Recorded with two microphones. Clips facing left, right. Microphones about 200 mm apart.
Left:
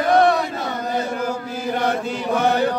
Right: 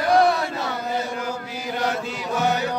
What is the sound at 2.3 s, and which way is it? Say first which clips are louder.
Chant: left 4 dB; 55° left (ahead or behind).